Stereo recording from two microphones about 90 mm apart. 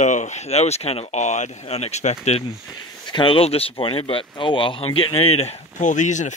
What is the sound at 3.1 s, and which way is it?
Speech, 65° left (ahead or behind).